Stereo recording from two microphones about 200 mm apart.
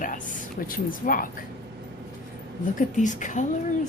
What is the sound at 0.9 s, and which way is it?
Speech, 45° left (ahead or behind).